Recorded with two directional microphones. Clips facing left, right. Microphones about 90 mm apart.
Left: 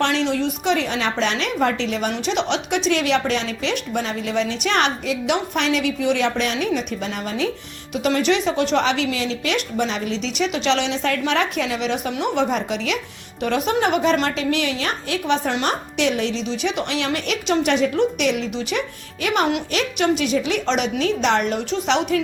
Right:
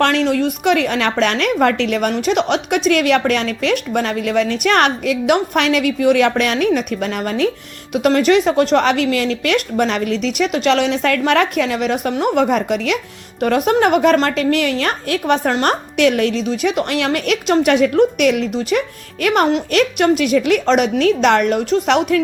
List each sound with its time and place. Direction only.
0.0 s a woman's voice: 50° right (ahead or behind)